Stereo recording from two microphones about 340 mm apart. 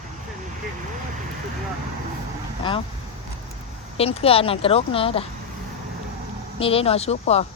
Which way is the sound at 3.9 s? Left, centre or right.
Centre.